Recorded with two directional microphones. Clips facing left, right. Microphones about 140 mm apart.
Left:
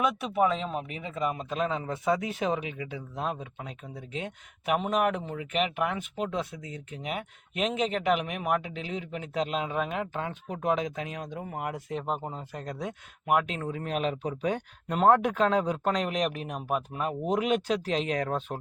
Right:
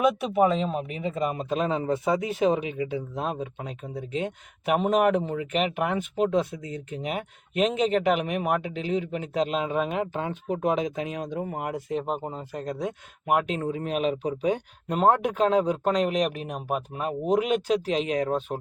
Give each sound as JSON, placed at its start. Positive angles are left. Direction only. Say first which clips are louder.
{"t": 0.0, "sound": "speech", "louder": "right 4 dB", "side_deg": -30}
{"t": 13.8, "sound": "speech", "louder": "right 2 dB", "side_deg": -15}
{"t": 17.8, "sound": "speech", "louder": "right 3 dB", "side_deg": -15}